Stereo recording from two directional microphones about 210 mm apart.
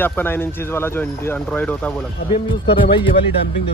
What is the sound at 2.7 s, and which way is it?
Speech, 25° left (ahead or behind).